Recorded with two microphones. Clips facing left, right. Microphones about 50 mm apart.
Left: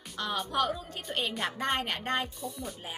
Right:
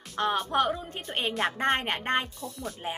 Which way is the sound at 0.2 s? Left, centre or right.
Right.